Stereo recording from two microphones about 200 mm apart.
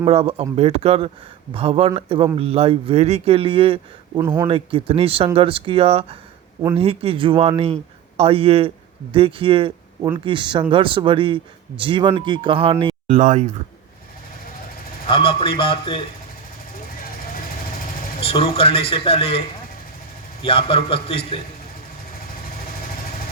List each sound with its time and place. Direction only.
0.0 s speech: 30° right (ahead or behind)
13.1 s speech: 40° right (ahead or behind)
15.0 s a man's voice: 25° left (ahead or behind)
18.2 s a man's voice: 30° left (ahead or behind)
20.4 s a man's voice: 25° left (ahead or behind)